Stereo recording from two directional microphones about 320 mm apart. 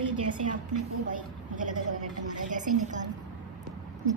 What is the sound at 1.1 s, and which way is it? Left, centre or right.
A woman's voice, right.